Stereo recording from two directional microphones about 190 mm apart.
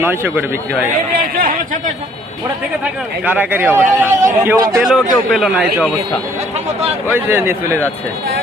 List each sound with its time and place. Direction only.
0.0 s a man's voice: 10° right (ahead or behind)
1.4 s speech: 45° right (ahead or behind)
3.2 s a man's voice: 10° right (ahead or behind)
7.1 s a man's voice: 10° right (ahead or behind)